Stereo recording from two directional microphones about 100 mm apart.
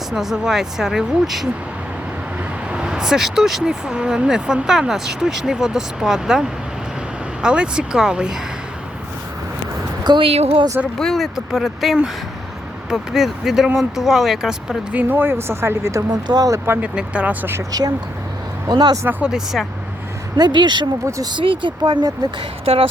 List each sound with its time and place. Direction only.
0.1 s speech: 5° right (ahead or behind)
2.6 s speech: 10° right (ahead or behind)
10.0 s a woman's voice: 45° right (ahead or behind)
10.2 s a woman's voice: 80° right
10.9 s speech: 5° left (ahead or behind)
14.9 s speech: 20° right (ahead or behind); by 16.6 s 40° right (ahead or behind)
16.6 s speech: 20° right (ahead or behind)
17.5 s speech: 35° right (ahead or behind)
19.2 s speech: 5° right (ahead or behind)
20.3 s speech: 45° right (ahead or behind)
21.0 s speech: 30° right (ahead or behind)
21.3 s speech: 55° right (ahead or behind)
21.8 s speech: 45° right (ahead or behind)
22.4 s speech: 65° right (ahead or behind)